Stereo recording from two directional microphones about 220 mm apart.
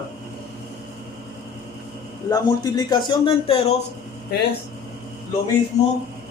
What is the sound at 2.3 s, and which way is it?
A man's voice, 20° left (ahead or behind).